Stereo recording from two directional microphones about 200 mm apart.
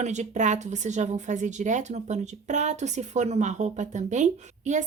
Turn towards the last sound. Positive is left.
turn(degrees=-35)  # may be behind; listen again after turning